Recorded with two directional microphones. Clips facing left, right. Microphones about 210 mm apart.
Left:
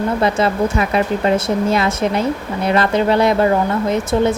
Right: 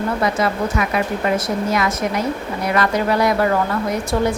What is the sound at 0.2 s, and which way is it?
Speech, 25° left (ahead or behind).